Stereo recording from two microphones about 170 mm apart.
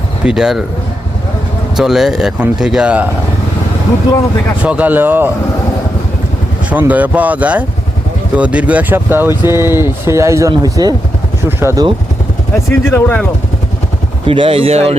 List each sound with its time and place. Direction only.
0.3 s speech: 5° right (ahead or behind)
1.7 s speech: centre (ahead or behind)
4.6 s speech: 10° right (ahead or behind)
6.7 s speech: 10° right (ahead or behind)
12.7 s speech: 10° left (ahead or behind)
14.3 s speech: 30° right (ahead or behind)